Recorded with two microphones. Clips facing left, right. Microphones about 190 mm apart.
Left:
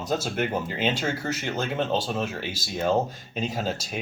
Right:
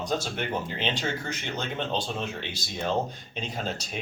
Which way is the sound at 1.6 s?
45° left (ahead or behind).